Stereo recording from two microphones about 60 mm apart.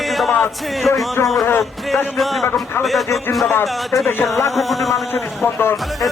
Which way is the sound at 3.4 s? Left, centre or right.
Left.